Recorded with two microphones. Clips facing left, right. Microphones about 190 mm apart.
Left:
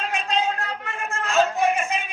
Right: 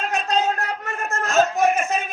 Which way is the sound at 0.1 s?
45° right (ahead or behind).